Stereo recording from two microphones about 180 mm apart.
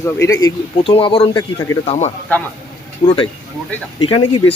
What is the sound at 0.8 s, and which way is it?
Speech, 30° left (ahead or behind).